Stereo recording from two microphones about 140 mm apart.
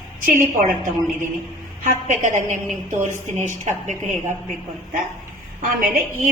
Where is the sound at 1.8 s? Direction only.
60° right (ahead or behind).